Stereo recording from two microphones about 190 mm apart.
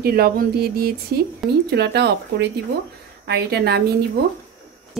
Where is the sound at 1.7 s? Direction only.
60° right (ahead or behind).